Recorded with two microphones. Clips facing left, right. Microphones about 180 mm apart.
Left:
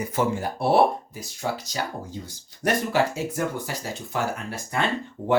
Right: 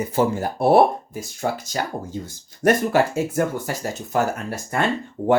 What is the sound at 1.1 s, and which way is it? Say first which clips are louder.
Speech: right 4 dB; 50° right (ahead or behind).